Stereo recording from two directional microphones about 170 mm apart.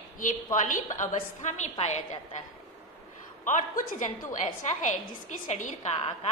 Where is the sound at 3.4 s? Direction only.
50° left (ahead or behind).